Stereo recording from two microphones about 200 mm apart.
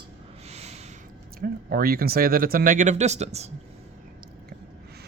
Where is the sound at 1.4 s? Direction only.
50° right (ahead or behind); by 3.5 s 35° right (ahead or behind).